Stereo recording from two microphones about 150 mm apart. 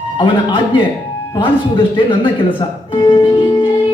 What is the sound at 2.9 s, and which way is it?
Music, 35° left (ahead or behind).